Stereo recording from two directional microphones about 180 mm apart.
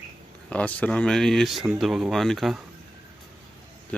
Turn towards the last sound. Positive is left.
turn(degrees=5)  # may be behind; listen again after turning